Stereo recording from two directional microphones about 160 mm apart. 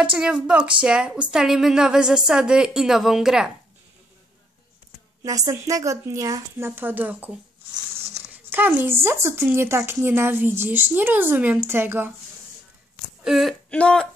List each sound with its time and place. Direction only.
0.0 s a woman's voice: 5° right (ahead or behind)
5.2 s a woman's voice: 20° right (ahead or behind)
8.5 s speech: 10° right (ahead or behind)
13.2 s speech: centre (ahead or behind)